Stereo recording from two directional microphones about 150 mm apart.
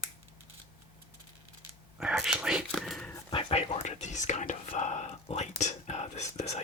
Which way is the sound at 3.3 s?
45° left (ahead or behind).